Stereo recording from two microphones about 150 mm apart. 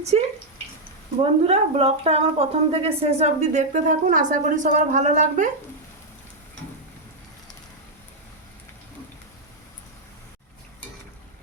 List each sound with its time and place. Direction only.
0.1 s a woman's voice: 45° right (ahead or behind)